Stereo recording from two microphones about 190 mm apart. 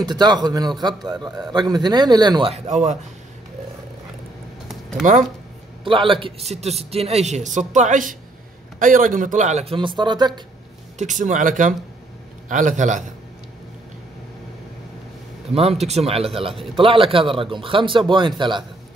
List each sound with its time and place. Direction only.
0.0 s a man's voice: 20° right (ahead or behind)
2.5 s a man's voice: 35° right (ahead or behind)
5.9 s a man's voice: 25° right (ahead or behind)
11.0 s a man's voice: 40° right (ahead or behind)
15.8 s a man's voice: 35° right (ahead or behind)